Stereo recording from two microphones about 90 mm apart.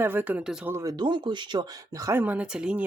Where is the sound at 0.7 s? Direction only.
35° right (ahead or behind).